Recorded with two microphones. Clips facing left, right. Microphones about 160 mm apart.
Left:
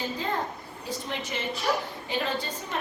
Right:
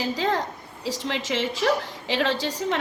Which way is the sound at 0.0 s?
90° right.